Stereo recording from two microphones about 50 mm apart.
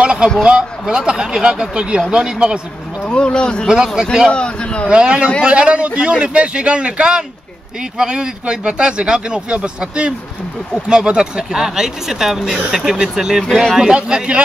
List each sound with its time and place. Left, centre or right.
0.0 s a sound: right
0.4 s speech: centre
3.1 s speech: centre
3.6 s speech: centre
4.3 s speech: left
4.8 s a man's voice: centre